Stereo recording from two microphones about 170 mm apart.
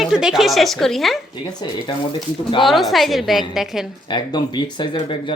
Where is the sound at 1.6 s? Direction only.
25° left (ahead or behind).